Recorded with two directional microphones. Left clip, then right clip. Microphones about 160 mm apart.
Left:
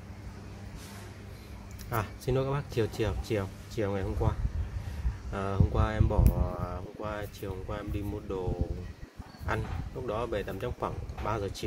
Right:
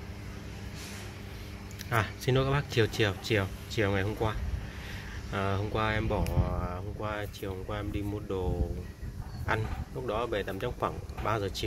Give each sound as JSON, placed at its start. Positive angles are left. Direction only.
{"t": 1.9, "sound": "speech", "side_deg": 5}
{"t": 9.5, "sound": "speech", "side_deg": 10}